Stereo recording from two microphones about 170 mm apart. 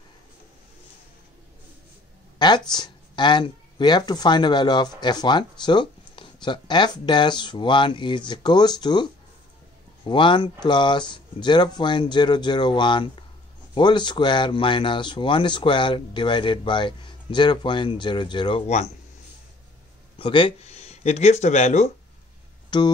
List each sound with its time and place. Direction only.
2.3 s a sound: 25° left (ahead or behind)
2.7 s speech: 25° left (ahead or behind)
20.2 s speech: 30° left (ahead or behind)
22.7 s speech: 25° left (ahead or behind)